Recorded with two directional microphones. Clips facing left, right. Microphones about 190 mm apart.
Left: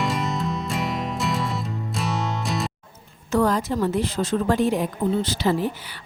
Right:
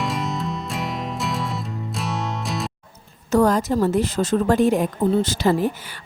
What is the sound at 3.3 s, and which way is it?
A woman's voice, 40° right (ahead or behind).